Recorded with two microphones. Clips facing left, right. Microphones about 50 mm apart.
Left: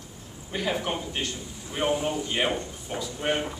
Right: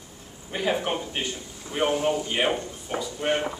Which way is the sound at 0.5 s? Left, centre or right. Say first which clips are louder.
Right 2 dB; centre.